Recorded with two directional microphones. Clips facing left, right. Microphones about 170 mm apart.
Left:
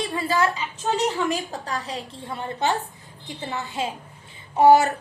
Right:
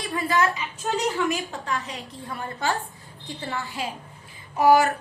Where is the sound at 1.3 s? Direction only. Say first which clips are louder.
Left 1 dB; 35° left (ahead or behind).